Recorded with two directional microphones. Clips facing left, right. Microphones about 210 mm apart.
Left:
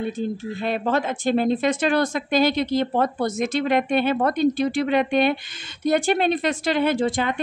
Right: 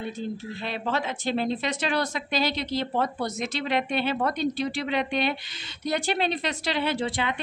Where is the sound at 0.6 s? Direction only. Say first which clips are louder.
Left 7 dB; 50° left (ahead or behind).